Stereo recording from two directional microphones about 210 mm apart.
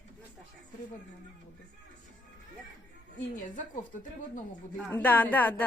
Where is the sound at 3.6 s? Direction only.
40° left (ahead or behind).